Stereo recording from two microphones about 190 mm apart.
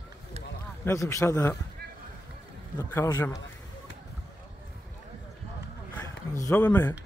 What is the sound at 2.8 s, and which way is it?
Speech, 10° left (ahead or behind).